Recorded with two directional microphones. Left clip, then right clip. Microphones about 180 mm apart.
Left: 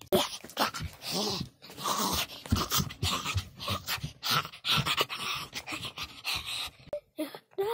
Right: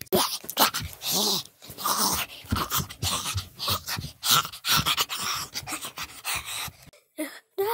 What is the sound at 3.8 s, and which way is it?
Dog, centre (ahead or behind).